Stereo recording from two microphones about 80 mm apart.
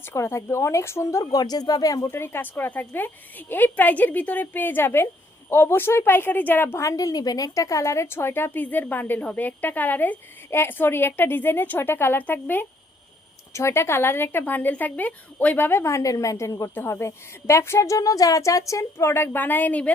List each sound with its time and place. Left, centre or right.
0.0 s a woman's voice: left
1.2 s speech: left
2.0 s a woman's voice: left
6.8 s a woman's voice: left
13.5 s a woman's voice: left
15.8 s a woman's voice: left